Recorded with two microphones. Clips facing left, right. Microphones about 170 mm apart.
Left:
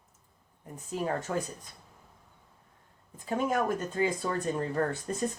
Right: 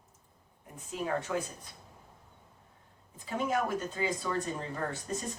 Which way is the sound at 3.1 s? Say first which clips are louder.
Left 3 dB; 45° left (ahead or behind).